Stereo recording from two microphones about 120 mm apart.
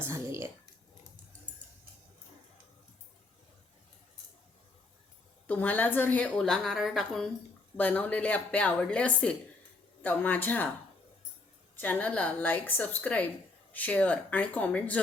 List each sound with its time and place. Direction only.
0.0 s a sound: 20° right (ahead or behind)
5.5 s a woman's voice: 15° left (ahead or behind)
7.8 s a woman's voice: 15° left (ahead or behind)
11.8 s a woman's voice: 15° left (ahead or behind)